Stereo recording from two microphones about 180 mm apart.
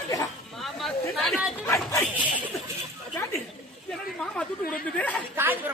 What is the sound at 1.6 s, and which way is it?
Dog, 15° left (ahead or behind).